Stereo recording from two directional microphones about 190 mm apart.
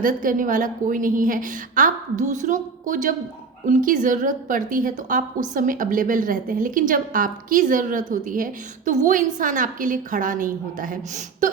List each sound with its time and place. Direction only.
0.0 s a woman's voice: 45° right (ahead or behind)